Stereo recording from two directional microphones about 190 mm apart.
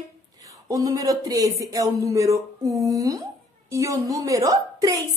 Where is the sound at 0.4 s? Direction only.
20° right (ahead or behind).